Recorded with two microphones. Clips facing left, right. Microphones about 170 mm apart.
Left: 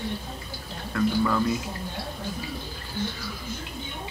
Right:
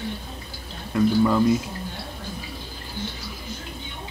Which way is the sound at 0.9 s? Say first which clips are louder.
Right 5 dB; 20° right (ahead or behind).